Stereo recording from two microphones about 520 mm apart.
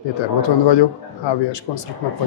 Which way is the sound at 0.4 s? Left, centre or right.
Left.